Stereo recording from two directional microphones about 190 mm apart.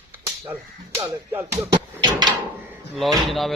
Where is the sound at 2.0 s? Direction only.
20° right (ahead or behind).